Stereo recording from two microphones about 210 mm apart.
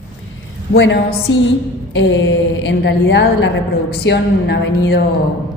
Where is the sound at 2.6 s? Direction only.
55° left (ahead or behind).